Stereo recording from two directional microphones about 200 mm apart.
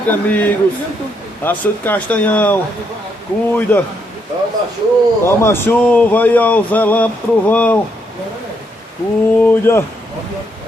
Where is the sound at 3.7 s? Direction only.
10° left (ahead or behind).